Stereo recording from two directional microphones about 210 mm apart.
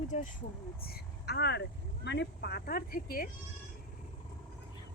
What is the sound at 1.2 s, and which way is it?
Speech, 50° left (ahead or behind).